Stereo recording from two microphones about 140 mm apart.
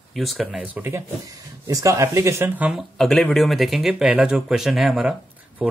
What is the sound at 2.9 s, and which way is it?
Speech, 5° left (ahead or behind).